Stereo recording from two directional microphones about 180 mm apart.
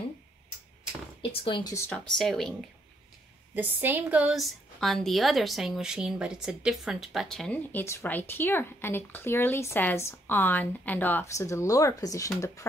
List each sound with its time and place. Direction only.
1.3 s speech: 30° left (ahead or behind)
1.9 s speech: centre (ahead or behind)
3.5 s a woman's voice: 10° right (ahead or behind); by 12.6 s 15° left (ahead or behind)